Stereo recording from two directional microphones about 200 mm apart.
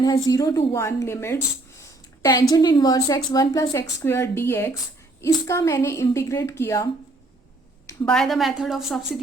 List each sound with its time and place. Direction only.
0.3 s a woman's voice: 15° left (ahead or behind)
7.9 s a woman's voice: 5° left (ahead or behind)